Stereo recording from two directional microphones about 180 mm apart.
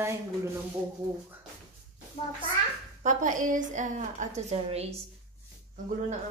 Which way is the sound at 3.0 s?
45° right (ahead or behind).